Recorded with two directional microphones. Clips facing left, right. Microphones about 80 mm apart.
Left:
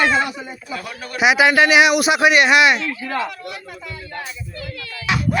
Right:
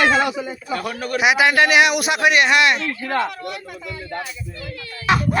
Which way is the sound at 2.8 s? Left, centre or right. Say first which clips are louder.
Right 2 dB; right.